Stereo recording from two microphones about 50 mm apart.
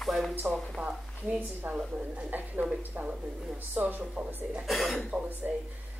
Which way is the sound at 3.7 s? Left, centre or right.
Right.